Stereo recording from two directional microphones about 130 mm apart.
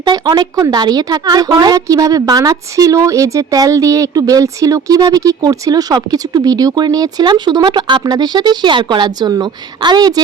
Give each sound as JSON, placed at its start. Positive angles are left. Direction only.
{"t": 0.0, "sound": "a woman's voice", "side_deg": -35}